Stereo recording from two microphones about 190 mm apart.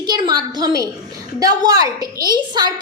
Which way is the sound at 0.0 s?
20° right (ahead or behind).